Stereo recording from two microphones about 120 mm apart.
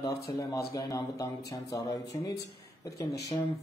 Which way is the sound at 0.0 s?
30° left (ahead or behind).